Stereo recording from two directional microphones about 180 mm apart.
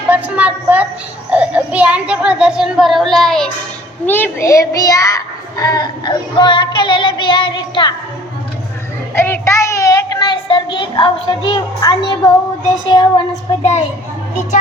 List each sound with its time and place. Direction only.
0.1 s a sound: 10° right (ahead or behind)
1.3 s a child's voice: 5° right (ahead or behind); by 7.9 s 25° left (ahead or behind)
9.1 s a child's voice: 10° left (ahead or behind)
13.6 s a child's voice: 40° left (ahead or behind)